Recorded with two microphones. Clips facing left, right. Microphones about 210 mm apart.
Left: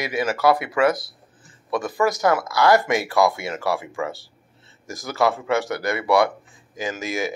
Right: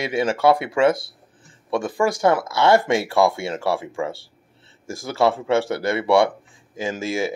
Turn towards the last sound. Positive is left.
turn(degrees=-30)  # may be behind; listen again after turning